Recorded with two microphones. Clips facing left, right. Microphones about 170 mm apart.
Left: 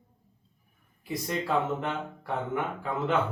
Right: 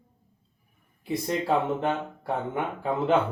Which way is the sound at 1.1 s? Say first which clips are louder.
Right 4 dB; 30° right (ahead or behind).